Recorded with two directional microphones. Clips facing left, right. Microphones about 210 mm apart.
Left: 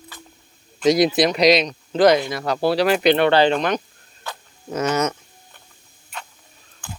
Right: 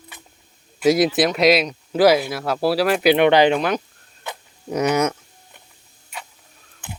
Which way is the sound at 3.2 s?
15° right (ahead or behind).